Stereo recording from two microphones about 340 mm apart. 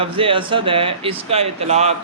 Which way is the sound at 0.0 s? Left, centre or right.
Centre.